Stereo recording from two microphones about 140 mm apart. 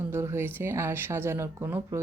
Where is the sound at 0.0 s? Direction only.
15° right (ahead or behind).